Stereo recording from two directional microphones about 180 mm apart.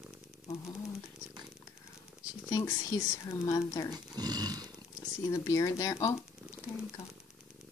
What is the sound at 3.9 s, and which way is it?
Speech, 20° right (ahead or behind).